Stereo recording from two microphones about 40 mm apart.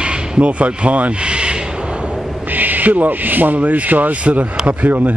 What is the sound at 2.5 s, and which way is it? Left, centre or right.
Owl, right.